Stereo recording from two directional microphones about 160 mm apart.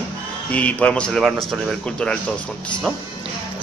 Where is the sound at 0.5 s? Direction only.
10° left (ahead or behind).